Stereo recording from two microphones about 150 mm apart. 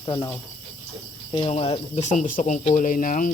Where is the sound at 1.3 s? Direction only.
40° left (ahead or behind).